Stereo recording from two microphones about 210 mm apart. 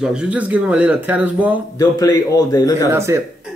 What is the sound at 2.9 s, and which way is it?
Speech, 15° right (ahead or behind).